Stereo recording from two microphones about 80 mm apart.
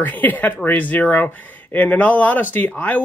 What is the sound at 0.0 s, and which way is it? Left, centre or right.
Speech, left.